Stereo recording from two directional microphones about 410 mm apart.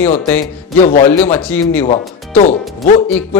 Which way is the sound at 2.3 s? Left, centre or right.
Centre.